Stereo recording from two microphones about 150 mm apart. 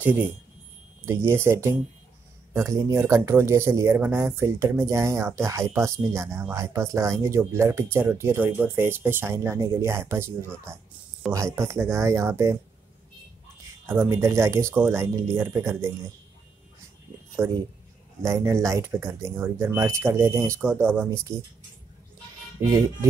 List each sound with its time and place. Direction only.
0.0 s speech: 10° right (ahead or behind)
13.8 s speech: 15° right (ahead or behind)
18.2 s speech: 20° right (ahead or behind)
22.6 s speech: 25° right (ahead or behind)